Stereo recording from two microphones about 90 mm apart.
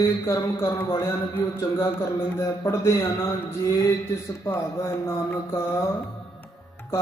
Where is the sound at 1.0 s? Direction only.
25° left (ahead or behind).